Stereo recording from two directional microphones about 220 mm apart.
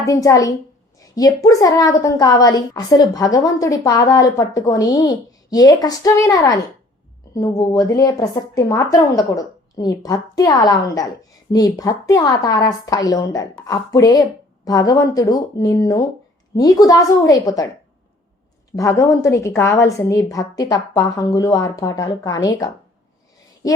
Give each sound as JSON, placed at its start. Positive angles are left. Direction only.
{"t": 0.0, "sound": "a woman's voice", "side_deg": 15}
{"t": 18.8, "sound": "a woman's voice", "side_deg": 15}